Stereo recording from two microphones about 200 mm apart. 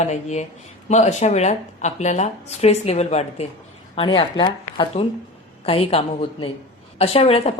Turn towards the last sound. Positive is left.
turn(degrees=30)  # may be behind; listen again after turning